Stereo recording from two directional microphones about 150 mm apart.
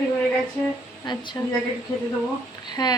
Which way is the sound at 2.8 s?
30° left (ahead or behind).